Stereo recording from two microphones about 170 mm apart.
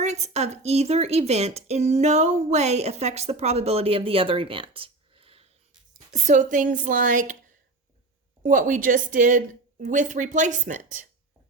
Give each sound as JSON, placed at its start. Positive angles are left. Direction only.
{"t": 0.0, "sound": "speech", "side_deg": -40}
{"t": 6.1, "sound": "a woman's voice", "side_deg": -45}
{"t": 8.4, "sound": "a woman's voice", "side_deg": -50}